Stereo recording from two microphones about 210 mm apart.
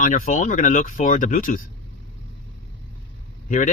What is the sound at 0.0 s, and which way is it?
Speech, 35° left (ahead or behind).